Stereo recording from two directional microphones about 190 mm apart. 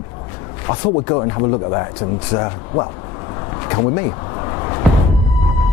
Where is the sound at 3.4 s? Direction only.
20° left (ahead or behind).